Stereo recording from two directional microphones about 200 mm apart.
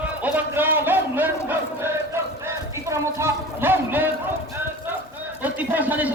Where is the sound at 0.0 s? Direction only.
10° right (ahead or behind).